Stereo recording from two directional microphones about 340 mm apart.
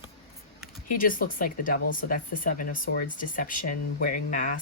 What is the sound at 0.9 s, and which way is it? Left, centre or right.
Speech, left.